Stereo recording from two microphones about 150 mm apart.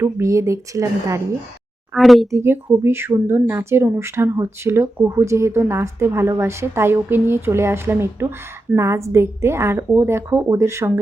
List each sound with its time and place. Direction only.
0.0 s a woman's voice: 20° right (ahead or behind)
1.9 s speech: centre (ahead or behind)
2.3 s speech: 15° right (ahead or behind)